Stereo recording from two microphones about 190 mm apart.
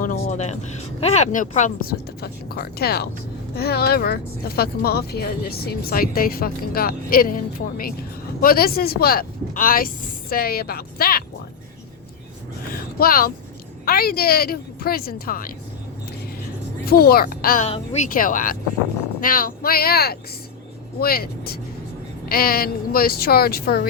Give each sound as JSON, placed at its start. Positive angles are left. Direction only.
{"t": 0.0, "sound": "a sound", "side_deg": 40}
{"t": 0.9, "sound": "speech", "side_deg": 35}
{"t": 13.0, "sound": "speech", "side_deg": 50}
{"t": 16.8, "sound": "speech", "side_deg": 55}